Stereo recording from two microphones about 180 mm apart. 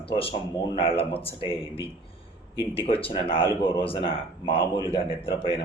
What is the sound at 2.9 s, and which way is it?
Speech, 30° left (ahead or behind).